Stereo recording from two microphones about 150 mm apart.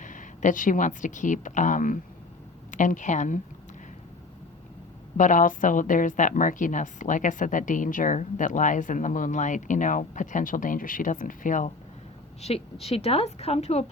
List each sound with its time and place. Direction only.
0.0 s a woman's voice: 60° left (ahead or behind)
5.1 s a woman's voice: 60° left (ahead or behind)
12.4 s a woman's voice: 45° left (ahead or behind)